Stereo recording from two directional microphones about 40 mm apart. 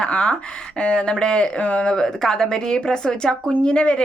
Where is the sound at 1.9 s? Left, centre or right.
Centre.